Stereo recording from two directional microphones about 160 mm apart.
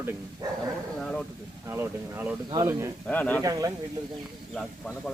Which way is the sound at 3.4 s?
20° right (ahead or behind).